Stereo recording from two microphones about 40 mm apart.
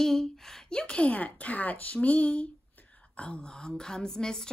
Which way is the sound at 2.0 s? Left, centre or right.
Left.